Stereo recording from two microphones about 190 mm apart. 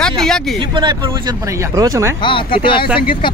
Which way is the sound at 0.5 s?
25° right (ahead or behind).